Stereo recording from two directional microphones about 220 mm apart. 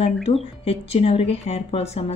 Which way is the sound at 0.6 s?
25° left (ahead or behind).